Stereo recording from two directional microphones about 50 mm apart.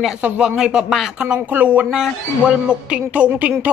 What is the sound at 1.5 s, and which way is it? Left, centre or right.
Speech, right.